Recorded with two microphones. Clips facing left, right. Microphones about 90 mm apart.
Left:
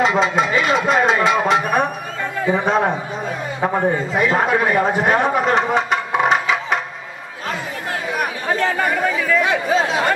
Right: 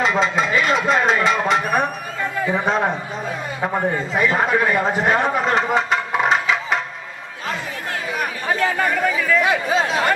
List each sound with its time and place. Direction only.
0.0 s a man's voice: 5° left (ahead or behind)
8.8 s speech: 5° right (ahead or behind)